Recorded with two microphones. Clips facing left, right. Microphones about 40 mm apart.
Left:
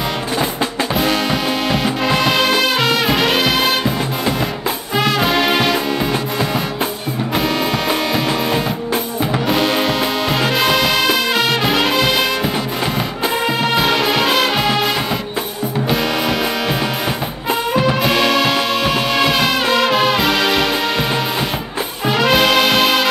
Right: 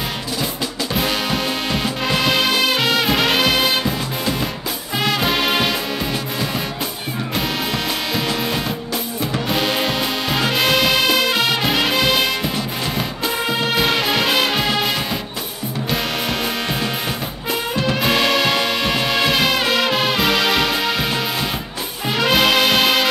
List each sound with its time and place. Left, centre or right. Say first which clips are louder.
0.9 s music: left 3 dB; centre
8.9 s drum: left 5 dB; left
9.5 s music: left 3 dB; centre
13.5 s music: left 2 dB; centre
17.5 s music: left 5 dB; centre
18.0 s music: left 2 dB; centre
22.0 s brass instrument: left 3 dB; centre